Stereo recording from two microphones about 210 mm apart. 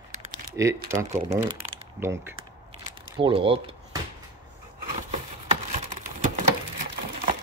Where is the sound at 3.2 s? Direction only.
25° right (ahead or behind).